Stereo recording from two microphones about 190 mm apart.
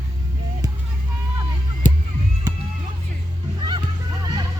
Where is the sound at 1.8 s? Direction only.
40° left (ahead or behind).